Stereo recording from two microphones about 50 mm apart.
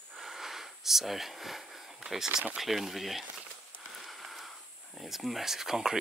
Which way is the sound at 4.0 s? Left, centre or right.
Centre.